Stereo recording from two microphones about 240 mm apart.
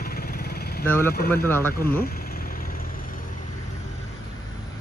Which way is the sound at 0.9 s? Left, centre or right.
Centre.